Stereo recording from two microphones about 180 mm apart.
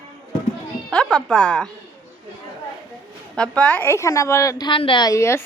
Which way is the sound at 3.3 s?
5° left (ahead or behind).